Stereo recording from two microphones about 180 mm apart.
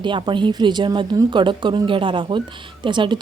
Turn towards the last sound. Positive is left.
turn(degrees=-25)  # may be behind; listen again after turning